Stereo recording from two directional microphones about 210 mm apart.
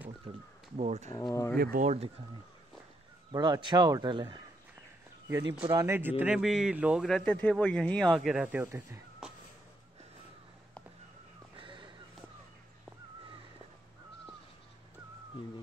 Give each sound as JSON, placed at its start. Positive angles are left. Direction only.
{"t": 0.7, "sound": "speech", "side_deg": -35}
{"t": 1.1, "sound": "speech", "side_deg": 15}
{"t": 1.6, "sound": "speech", "side_deg": -45}
{"t": 3.3, "sound": "speech", "side_deg": -20}
{"t": 5.7, "sound": "a man's voice", "side_deg": -15}
{"t": 11.5, "sound": "a sound", "side_deg": -25}